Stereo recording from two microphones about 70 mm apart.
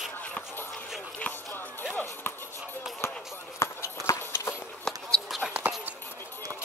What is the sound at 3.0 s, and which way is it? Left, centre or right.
Chop, left.